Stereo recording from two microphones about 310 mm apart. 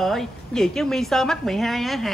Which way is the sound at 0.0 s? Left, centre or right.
Centre.